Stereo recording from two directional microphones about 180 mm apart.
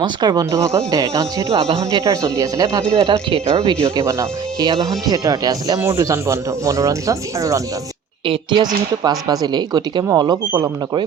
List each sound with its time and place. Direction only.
0.0 s speech: 20° right (ahead or behind)
1.5 s speech: 30° right (ahead or behind)
2.4 s speech: 20° right (ahead or behind)
2.9 s speech: 30° right (ahead or behind)
3.8 s speech: 15° right (ahead or behind)